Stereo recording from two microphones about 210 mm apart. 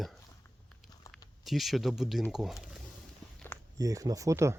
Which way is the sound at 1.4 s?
Centre (ahead or behind).